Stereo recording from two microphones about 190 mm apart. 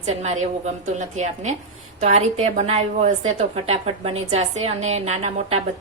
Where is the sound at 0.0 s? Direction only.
35° right (ahead or behind).